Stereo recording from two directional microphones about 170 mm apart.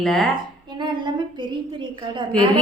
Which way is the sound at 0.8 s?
25° right (ahead or behind).